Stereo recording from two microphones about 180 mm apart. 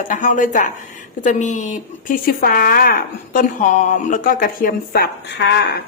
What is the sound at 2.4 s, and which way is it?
A woman's voice, 55° left (ahead or behind).